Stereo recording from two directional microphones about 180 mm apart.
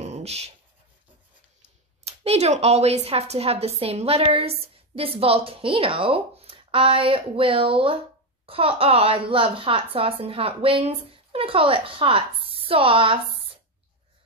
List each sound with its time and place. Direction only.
0.0 s writing: 35° right (ahead or behind)
2.0 s a woman's voice: 35° right (ahead or behind)